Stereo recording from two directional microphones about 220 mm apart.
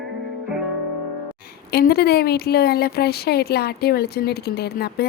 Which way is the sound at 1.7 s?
45° left (ahead or behind).